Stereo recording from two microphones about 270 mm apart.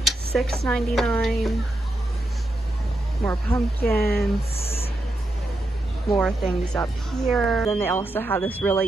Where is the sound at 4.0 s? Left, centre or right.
Left.